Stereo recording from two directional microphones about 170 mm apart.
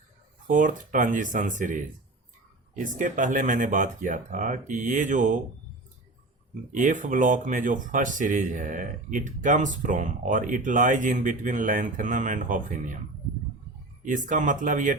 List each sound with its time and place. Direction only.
0.4 s speech: 50° right (ahead or behind)
6.7 s speech: 50° right (ahead or behind)
14.0 s speech: 50° right (ahead or behind)